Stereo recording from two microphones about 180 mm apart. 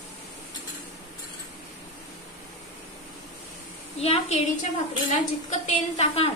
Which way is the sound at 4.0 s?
35° left (ahead or behind).